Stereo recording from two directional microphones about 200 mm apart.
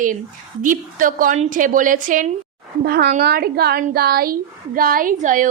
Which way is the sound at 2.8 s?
55° right (ahead or behind).